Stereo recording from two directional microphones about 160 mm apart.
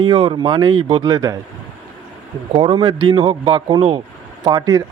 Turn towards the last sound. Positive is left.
turn(degrees=-25)  # may be behind; listen again after turning